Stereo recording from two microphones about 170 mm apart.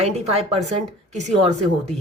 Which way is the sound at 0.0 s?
40° right (ahead or behind).